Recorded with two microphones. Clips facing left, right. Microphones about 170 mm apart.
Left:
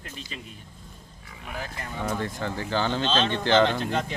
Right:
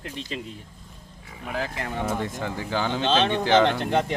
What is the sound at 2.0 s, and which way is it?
Speech, 10° right (ahead or behind).